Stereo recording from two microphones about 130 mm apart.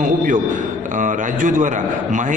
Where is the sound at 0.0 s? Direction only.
90° right.